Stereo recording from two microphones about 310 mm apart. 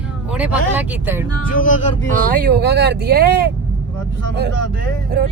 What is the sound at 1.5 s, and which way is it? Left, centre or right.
Speech, left.